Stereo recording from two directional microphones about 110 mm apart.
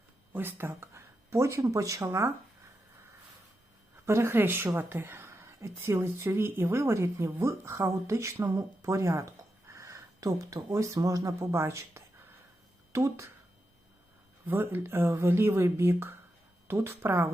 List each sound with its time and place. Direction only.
0.3 s speech: 20° right (ahead or behind)
4.0 s speech: 25° right (ahead or behind)
14.4 s speech: 20° right (ahead or behind)